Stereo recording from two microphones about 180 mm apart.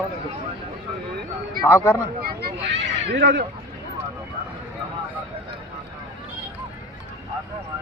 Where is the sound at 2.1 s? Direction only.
60° right (ahead or behind).